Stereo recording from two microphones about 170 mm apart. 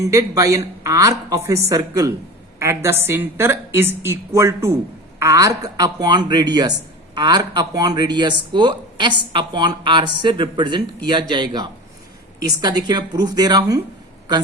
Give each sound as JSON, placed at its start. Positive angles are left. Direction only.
{"t": 0.0, "sound": "a woman's voice", "side_deg": -20}